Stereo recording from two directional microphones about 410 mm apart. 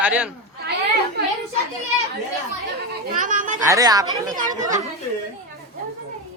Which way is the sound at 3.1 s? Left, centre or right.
Centre.